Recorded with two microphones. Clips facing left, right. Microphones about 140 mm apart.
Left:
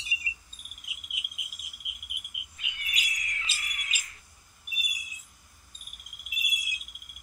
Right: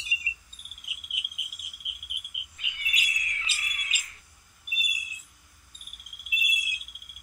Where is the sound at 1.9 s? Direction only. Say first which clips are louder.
Right 1 dB; 35° left (ahead or behind).